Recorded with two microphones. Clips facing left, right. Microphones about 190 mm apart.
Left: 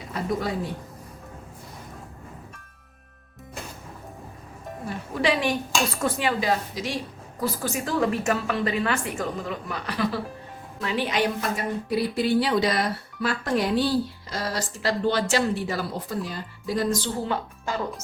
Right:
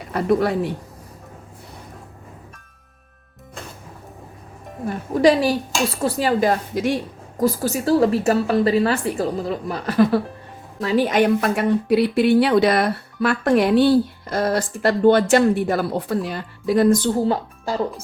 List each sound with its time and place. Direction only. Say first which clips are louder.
0.1 s speech: right 9 dB; 65° right (ahead or behind)
5.1 s a woman's voice: right 8 dB; 40° right (ahead or behind)